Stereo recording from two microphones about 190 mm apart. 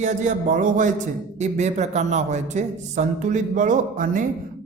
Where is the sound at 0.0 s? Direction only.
40° right (ahead or behind).